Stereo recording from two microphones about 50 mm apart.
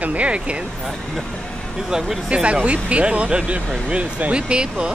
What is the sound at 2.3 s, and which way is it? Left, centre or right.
Speech, right.